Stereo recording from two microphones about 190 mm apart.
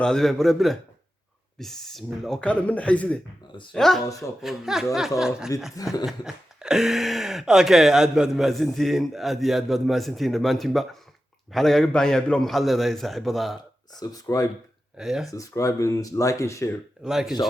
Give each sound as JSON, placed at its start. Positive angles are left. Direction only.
{"t": 0.0, "sound": "speech", "side_deg": 5}
{"t": 5.7, "sound": "speech", "side_deg": 20}
{"t": 6.1, "sound": "speech", "side_deg": 0}
{"t": 14.0, "sound": "speech", "side_deg": 20}
{"t": 14.9, "sound": "speech", "side_deg": 0}
{"t": 15.3, "sound": "speech", "side_deg": 15}
{"t": 17.0, "sound": "speech", "side_deg": -5}